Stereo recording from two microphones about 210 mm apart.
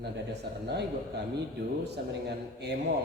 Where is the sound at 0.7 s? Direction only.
50° right (ahead or behind).